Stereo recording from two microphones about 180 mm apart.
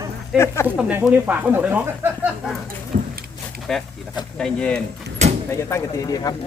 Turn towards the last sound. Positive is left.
turn(degrees=20)  # may be behind; listen again after turning